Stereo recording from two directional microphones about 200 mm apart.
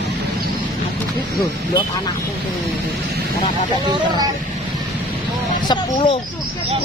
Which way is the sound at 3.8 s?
25° right (ahead or behind).